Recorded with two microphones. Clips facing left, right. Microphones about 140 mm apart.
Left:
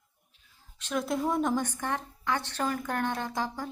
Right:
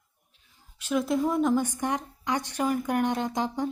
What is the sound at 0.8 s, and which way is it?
Speech, 5° right (ahead or behind).